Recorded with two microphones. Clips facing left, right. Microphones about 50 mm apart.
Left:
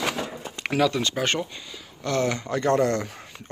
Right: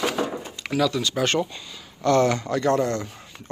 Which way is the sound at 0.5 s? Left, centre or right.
Left.